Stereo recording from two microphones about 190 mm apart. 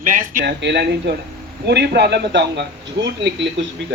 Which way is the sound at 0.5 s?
60° right (ahead or behind).